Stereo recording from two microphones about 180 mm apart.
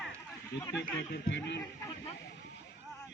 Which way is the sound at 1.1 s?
75° left (ahead or behind).